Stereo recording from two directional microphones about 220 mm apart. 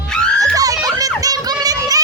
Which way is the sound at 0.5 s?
15° right (ahead or behind).